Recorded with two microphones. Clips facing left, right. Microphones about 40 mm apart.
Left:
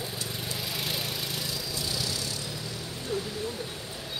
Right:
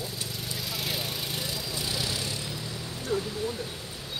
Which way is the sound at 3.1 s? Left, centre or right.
Centre.